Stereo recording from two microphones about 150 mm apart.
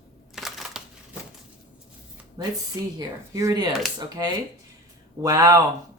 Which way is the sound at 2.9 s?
25° right (ahead or behind).